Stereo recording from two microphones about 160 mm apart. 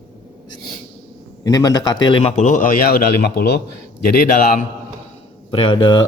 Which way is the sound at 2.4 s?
50° left (ahead or behind).